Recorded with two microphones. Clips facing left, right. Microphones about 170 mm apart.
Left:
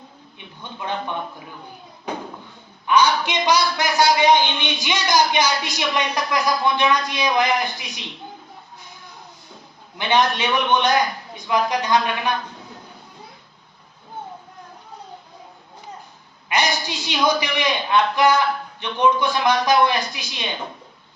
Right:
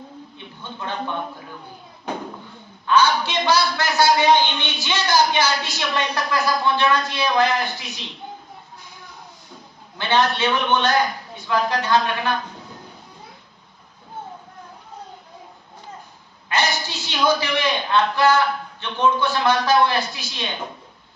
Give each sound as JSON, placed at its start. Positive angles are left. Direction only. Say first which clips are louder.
{"t": 2.8, "sound": "a man's voice", "louder": "even", "side_deg": 15}
{"t": 10.0, "sound": "a man's voice", "louder": "even", "side_deg": 15}
{"t": 16.5, "sound": "a man's voice", "louder": "left 1 dB", "side_deg": 15}